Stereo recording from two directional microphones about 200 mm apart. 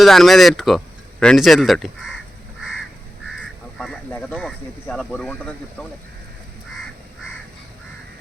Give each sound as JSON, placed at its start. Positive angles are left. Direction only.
{"t": 0.0, "sound": "speech", "side_deg": 0}
{"t": 3.8, "sound": "speech", "side_deg": 5}